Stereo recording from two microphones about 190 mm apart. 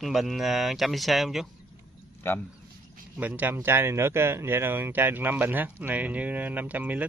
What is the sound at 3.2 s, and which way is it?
Speech, 10° right (ahead or behind).